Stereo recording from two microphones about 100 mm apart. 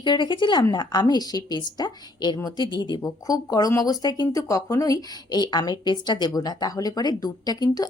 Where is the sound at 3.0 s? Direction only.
35° left (ahead or behind).